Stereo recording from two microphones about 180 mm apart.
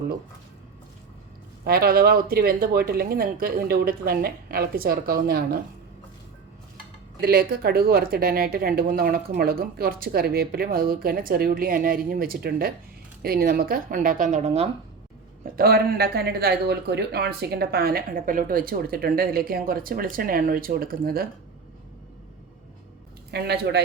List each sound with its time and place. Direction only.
1.6 s speech: 55° right (ahead or behind)
7.2 s a woman's voice: 60° right (ahead or behind); by 14.7 s 35° right (ahead or behind)
15.5 s speech: 55° right (ahead or behind)
23.3 s speech: 65° right (ahead or behind)